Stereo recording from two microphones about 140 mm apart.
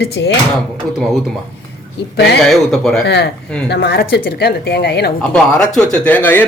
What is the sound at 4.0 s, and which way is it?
Speech, 90° left.